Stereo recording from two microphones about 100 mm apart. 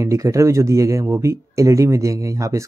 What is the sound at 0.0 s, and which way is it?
Speech, 30° right (ahead or behind).